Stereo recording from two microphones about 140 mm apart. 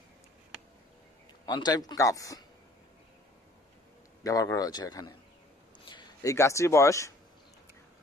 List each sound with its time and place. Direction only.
1.4 s a man's voice: 30° left (ahead or behind)
4.2 s a man's voice: 25° left (ahead or behind)
5.9 s a sound: 35° left (ahead or behind)
6.3 s a man's voice: 20° left (ahead or behind)